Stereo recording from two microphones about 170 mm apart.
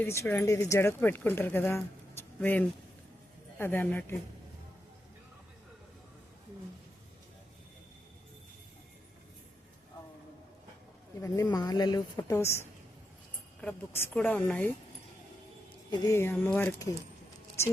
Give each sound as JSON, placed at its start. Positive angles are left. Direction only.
{"t": 0.0, "sound": "speech", "side_deg": 15}
{"t": 11.5, "sound": "a woman's voice", "side_deg": 25}
{"t": 15.9, "sound": "speech", "side_deg": 15}